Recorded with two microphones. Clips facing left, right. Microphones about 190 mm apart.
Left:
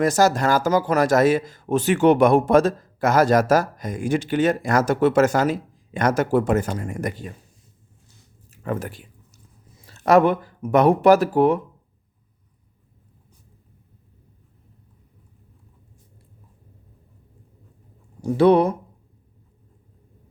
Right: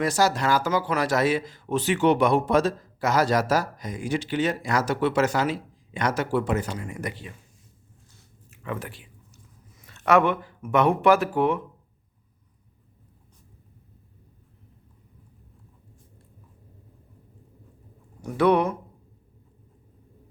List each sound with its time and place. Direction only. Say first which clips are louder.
0.0 s speech: left 5 dB; 45° left (ahead or behind)
8.4 s a sound: left 6 dB; 40° left (ahead or behind)
9.7 s speech: left 4 dB; 35° left (ahead or behind)
18.2 s speech: left 5 dB; 30° left (ahead or behind)